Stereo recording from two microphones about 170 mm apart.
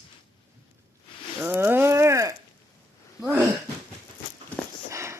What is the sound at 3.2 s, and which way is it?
Wheeze, 10° right (ahead or behind).